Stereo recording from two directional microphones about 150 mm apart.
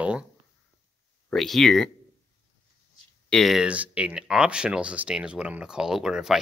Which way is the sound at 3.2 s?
Centre (ahead or behind).